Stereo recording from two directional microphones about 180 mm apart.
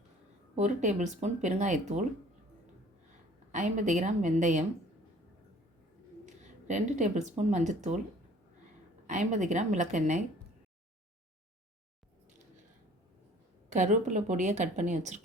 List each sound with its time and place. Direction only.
0.5 s speech: 40° right (ahead or behind)
3.5 s a woman's voice: 45° right (ahead or behind)
6.2 s speech: 40° right (ahead or behind)
9.0 s a woman's voice: 45° right (ahead or behind)
13.7 s speech: 40° right (ahead or behind)